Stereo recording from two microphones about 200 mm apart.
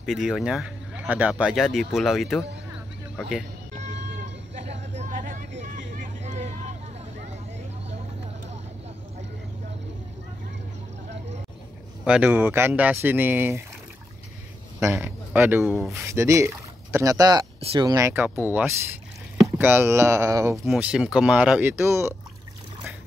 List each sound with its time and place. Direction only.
0.0 s speech: centre (ahead or behind)
4.6 s a sound: 35° right (ahead or behind)
5.9 s vehicle: 35° right (ahead or behind)
12.0 s speech: 5° right (ahead or behind)
15.0 s speech: 10° right (ahead or behind)
15.9 s speech: 15° right (ahead or behind)
20.6 s speech: 5° right (ahead or behind)